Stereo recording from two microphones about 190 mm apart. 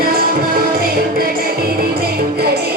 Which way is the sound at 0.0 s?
50° right (ahead or behind).